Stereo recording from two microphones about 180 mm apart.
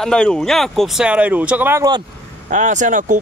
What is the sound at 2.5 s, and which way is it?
Speech, 40° right (ahead or behind).